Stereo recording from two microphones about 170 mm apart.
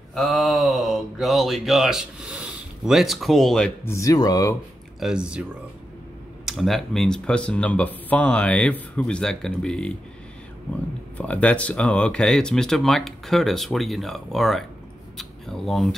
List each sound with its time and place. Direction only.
0.1 s speech: centre (ahead or behind)
3.9 s speech: 20° left (ahead or behind)
5.0 s speech: 5° right (ahead or behind)
11.1 s speech: 5° left (ahead or behind)